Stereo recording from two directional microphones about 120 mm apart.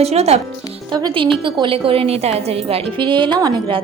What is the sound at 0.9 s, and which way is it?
A woman's voice, 40° right (ahead or behind).